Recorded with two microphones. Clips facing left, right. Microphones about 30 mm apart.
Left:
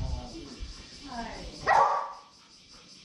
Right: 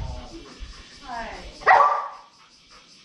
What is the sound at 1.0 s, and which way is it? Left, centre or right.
Dog, right.